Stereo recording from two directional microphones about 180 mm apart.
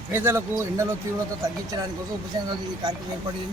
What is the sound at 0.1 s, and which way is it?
Speech, 10° right (ahead or behind).